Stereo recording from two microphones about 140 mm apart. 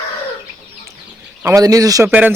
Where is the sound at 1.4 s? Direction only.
25° right (ahead or behind).